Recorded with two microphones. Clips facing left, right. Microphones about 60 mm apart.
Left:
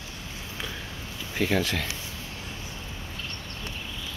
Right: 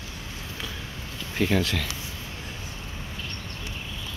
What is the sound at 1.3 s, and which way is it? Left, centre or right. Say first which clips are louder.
Speech: right 1 dB; centre.